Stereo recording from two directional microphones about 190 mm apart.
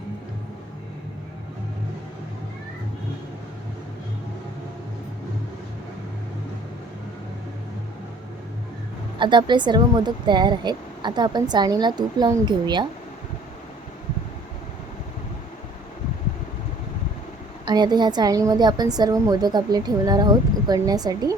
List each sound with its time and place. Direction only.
9.1 s speech: 25° right (ahead or behind)
17.7 s speech: 20° right (ahead or behind)